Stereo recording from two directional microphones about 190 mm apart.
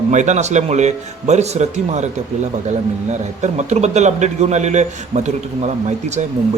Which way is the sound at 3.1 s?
35° right (ahead or behind).